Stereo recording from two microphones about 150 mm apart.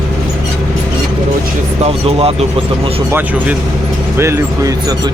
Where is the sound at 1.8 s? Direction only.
40° right (ahead or behind).